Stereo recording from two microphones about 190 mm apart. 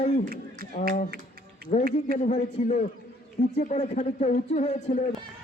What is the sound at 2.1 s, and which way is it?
Speech, 40° left (ahead or behind).